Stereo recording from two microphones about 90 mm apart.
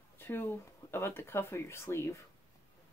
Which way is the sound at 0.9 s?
25° left (ahead or behind).